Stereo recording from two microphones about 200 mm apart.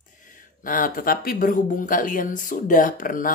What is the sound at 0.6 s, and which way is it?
Speech, 45° left (ahead or behind).